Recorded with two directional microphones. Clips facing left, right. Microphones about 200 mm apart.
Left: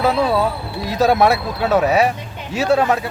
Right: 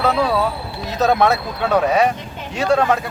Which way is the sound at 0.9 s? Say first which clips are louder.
Left 1 dB; 10° left (ahead or behind).